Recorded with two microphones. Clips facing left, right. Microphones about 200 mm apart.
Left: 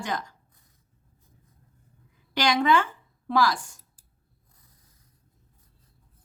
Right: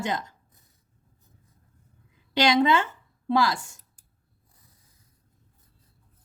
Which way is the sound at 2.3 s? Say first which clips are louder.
Right 2 dB; 20° right (ahead or behind).